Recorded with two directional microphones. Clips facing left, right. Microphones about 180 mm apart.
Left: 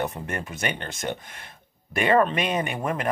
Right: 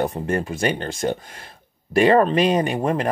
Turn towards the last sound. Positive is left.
turn(degrees=-30)  # may be behind; listen again after turning